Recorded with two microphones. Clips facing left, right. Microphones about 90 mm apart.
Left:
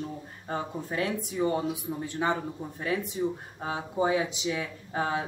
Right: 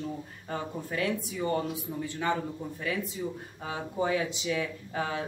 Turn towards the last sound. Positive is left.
turn(degrees=30)  # may be behind; listen again after turning